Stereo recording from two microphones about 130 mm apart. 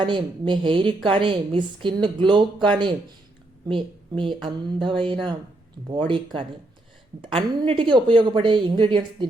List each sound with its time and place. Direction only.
0.0 s speech: 35° right (ahead or behind)